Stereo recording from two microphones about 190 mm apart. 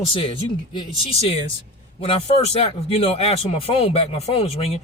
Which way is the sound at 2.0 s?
30° left (ahead or behind).